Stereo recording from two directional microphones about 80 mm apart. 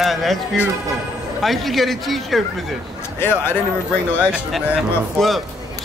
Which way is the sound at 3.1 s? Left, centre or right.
Left.